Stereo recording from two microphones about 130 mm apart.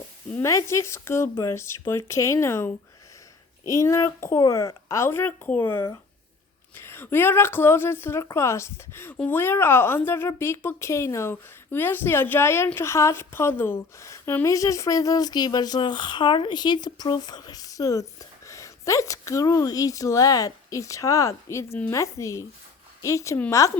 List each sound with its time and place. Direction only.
0.3 s a woman's voice: 20° left (ahead or behind)